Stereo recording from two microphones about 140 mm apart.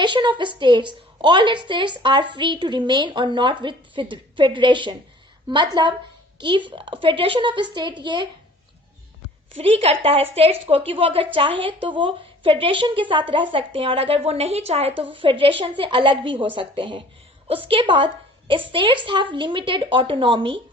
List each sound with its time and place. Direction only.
0.0 s a woman's voice: 35° right (ahead or behind)
9.6 s a woman's voice: 45° right (ahead or behind)